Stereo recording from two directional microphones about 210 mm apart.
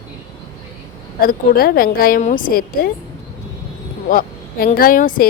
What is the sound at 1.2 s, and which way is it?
A woman's voice, 45° left (ahead or behind).